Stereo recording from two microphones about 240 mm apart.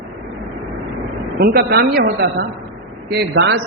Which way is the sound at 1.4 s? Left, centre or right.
Right.